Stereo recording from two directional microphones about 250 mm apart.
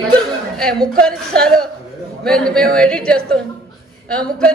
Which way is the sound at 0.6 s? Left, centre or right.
Centre.